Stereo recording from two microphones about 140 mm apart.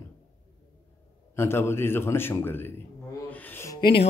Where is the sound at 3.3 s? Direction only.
15° left (ahead or behind).